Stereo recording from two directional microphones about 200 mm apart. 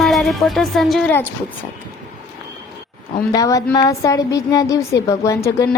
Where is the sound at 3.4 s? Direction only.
15° left (ahead or behind).